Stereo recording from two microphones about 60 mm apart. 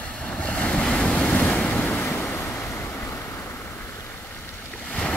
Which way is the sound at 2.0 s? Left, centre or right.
Left.